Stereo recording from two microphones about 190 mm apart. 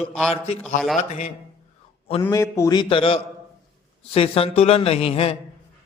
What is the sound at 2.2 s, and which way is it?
A man's voice, 15° left (ahead or behind).